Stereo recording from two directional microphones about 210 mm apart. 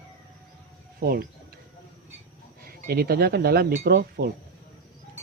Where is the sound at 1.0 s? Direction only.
45° right (ahead or behind).